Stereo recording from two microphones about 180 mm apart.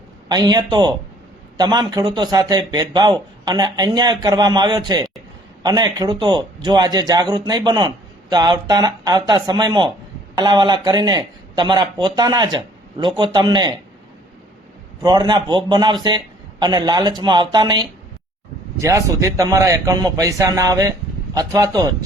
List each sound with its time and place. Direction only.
0.3 s a man's voice: 20° right (ahead or behind)
15.0 s a man's voice: 25° right (ahead or behind)